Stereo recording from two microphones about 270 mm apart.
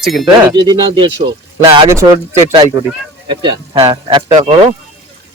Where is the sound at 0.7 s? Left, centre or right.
Centre.